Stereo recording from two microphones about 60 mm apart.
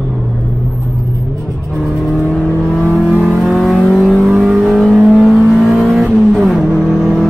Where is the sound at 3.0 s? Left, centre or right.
Centre.